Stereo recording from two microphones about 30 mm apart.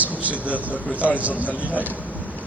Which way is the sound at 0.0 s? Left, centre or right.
Right.